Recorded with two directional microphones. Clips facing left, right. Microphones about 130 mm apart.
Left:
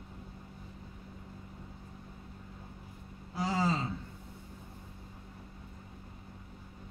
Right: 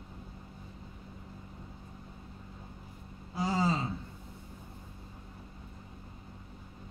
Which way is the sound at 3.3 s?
20° right (ahead or behind).